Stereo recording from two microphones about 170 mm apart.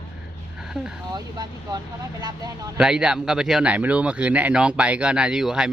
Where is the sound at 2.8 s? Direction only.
5° right (ahead or behind).